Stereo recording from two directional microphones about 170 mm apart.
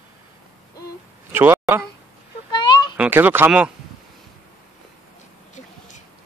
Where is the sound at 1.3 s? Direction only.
10° right (ahead or behind).